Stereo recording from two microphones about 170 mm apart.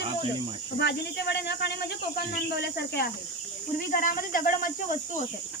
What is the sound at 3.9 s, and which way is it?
Speech, 55° left (ahead or behind).